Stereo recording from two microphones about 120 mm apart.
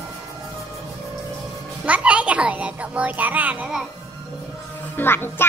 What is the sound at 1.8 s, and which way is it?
A child's voice, 10° right (ahead or behind).